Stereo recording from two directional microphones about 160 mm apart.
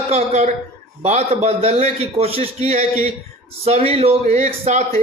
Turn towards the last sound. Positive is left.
turn(degrees=-45)  # may be behind; listen again after turning